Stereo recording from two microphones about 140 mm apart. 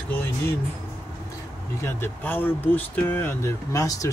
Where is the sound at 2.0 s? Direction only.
15° left (ahead or behind).